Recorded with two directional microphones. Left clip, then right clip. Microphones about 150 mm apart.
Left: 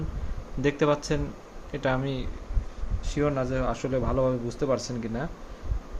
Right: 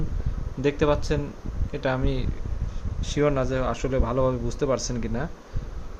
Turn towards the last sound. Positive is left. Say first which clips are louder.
# right 2 dB
turn(degrees=-15)  # may be behind; listen again after turning